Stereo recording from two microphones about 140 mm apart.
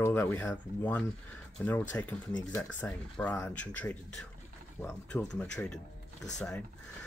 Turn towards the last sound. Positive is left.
turn(degrees=5)  # may be behind; listen again after turning